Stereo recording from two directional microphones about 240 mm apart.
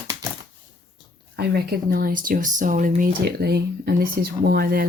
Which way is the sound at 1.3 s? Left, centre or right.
Right.